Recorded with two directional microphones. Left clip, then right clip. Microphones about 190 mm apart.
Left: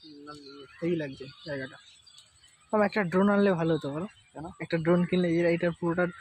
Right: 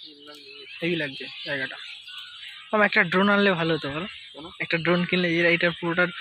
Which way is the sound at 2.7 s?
Centre (ahead or behind).